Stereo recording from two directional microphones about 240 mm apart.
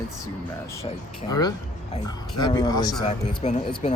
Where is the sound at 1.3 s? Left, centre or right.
Centre.